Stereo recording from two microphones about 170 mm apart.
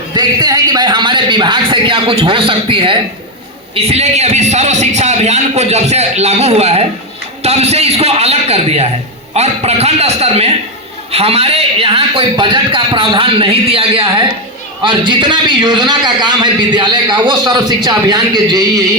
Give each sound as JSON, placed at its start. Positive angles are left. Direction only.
{"t": 0.2, "sound": "a man's voice", "side_deg": -25}